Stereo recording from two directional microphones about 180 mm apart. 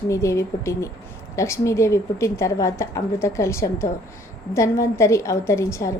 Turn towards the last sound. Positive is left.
turn(degrees=15)  # may be behind; listen again after turning